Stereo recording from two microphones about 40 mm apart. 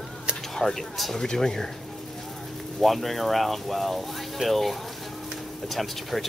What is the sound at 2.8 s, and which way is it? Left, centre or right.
Speech, centre.